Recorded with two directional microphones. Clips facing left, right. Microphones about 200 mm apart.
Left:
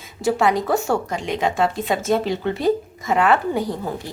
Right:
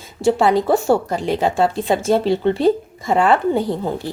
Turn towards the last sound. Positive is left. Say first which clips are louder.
# right 4 dB
turn(degrees=-30)  # may be behind; listen again after turning